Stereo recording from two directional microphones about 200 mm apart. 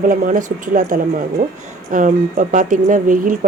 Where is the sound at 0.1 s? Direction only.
40° right (ahead or behind).